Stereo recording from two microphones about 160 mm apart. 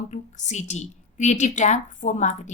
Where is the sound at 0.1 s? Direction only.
45° left (ahead or behind).